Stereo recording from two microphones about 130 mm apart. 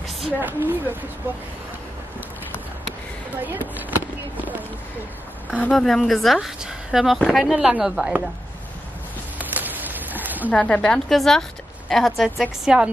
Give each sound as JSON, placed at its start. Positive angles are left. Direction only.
{"t": 0.4, "sound": "speech", "side_deg": -15}
{"t": 3.4, "sound": "speech", "side_deg": -15}
{"t": 9.4, "sound": "a sound", "side_deg": -15}
{"t": 10.5, "sound": "a woman's voice", "side_deg": 10}